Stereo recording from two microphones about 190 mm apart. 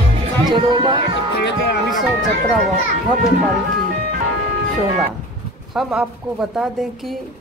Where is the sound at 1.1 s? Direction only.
65° left (ahead or behind).